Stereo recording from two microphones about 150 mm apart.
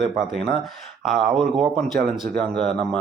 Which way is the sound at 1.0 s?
Centre (ahead or behind).